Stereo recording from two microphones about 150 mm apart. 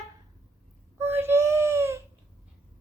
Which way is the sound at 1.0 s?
15° right (ahead or behind).